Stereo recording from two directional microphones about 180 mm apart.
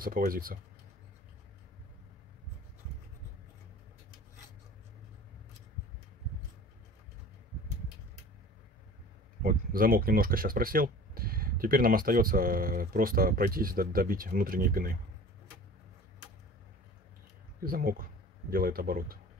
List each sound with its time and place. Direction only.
0.0 s speech: 55° right (ahead or behind)
9.4 s speech: 55° right (ahead or behind)
17.6 s a man's voice: 55° right (ahead or behind)